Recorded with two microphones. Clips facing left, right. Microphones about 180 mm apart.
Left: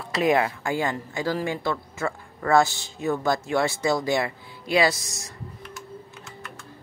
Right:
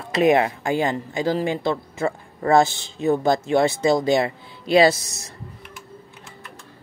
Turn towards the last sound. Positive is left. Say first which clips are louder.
# right 6 dB
turn(degrees=-30)  # may be behind; listen again after turning